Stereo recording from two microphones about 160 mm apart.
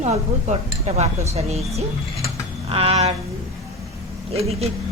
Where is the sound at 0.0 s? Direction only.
45° right (ahead or behind).